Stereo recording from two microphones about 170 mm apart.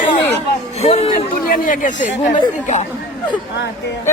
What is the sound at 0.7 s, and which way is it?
Speech, 35° left (ahead or behind).